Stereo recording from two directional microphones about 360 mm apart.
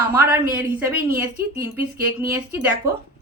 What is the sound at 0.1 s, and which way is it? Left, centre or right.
A woman's voice, centre.